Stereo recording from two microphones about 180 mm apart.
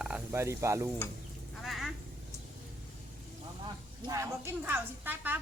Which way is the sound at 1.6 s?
Centre (ahead or behind).